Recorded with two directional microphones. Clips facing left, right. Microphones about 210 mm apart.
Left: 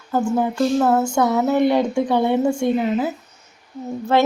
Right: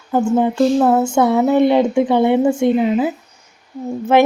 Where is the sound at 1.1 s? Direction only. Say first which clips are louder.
Right 4 dB; 25° right (ahead or behind).